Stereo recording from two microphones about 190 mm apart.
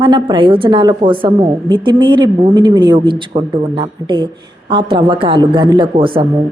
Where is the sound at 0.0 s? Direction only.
25° right (ahead or behind).